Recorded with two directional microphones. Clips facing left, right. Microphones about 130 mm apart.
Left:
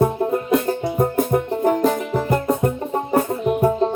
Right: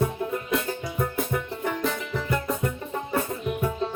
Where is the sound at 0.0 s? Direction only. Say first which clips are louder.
Left 8 dB; 45° left (ahead or behind).